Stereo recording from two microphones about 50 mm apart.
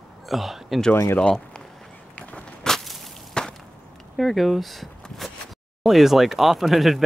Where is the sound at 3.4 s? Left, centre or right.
Centre.